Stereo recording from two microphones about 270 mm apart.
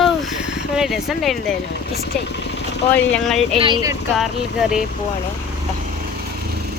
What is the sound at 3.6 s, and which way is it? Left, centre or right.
Speech, centre.